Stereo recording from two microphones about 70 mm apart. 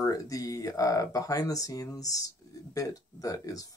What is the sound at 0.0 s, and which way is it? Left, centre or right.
Speech, left.